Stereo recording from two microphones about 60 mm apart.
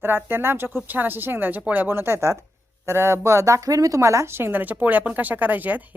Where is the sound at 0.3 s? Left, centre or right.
Right.